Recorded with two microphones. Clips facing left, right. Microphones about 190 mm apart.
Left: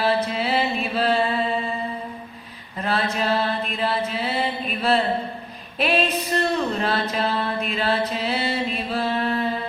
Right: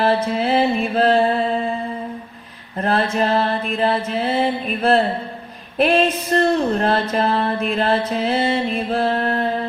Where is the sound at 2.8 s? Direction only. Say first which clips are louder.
Right 5 dB; 50° right (ahead or behind).